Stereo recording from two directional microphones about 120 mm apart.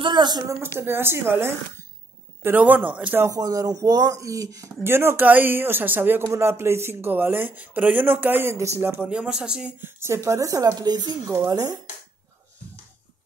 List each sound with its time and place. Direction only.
0.0 s speech: 40° right (ahead or behind)
0.7 s speech: 20° right (ahead or behind)
3.3 s speech: 30° right (ahead or behind); by 9.8 s 5° right (ahead or behind)
9.8 s speech: 20° right (ahead or behind)